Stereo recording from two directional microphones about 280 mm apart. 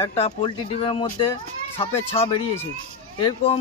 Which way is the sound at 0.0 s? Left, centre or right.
Centre.